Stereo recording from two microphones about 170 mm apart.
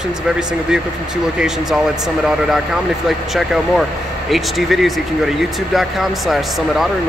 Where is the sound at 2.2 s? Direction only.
5° right (ahead or behind).